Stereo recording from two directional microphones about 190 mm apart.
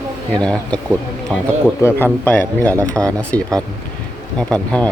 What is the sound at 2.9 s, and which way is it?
Speech, 20° right (ahead or behind).